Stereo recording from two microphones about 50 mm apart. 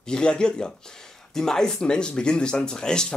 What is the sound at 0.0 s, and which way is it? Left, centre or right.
Speech, centre.